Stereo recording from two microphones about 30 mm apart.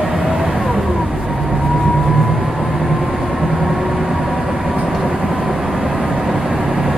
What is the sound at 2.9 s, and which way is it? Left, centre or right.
Vehicle, centre.